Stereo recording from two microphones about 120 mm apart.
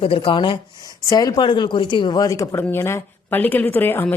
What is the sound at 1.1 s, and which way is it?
Speech, 35° left (ahead or behind).